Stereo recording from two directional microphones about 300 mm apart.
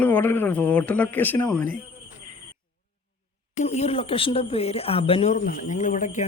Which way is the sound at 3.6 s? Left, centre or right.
Left.